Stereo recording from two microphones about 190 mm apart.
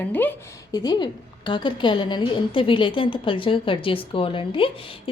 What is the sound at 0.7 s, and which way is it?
A woman's voice, 20° left (ahead or behind).